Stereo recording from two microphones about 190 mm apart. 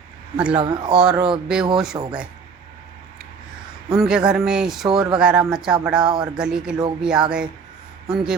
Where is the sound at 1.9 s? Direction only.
20° right (ahead or behind).